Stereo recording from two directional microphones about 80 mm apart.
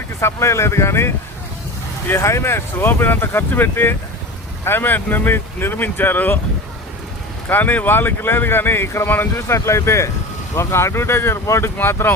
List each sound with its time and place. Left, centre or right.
0.2 s speech: left
7.5 s speech: left